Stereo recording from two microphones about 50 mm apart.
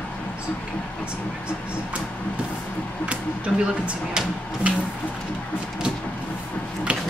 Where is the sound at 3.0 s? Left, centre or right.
Right.